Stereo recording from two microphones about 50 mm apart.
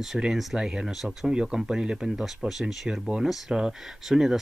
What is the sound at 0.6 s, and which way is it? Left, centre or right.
Speech, centre.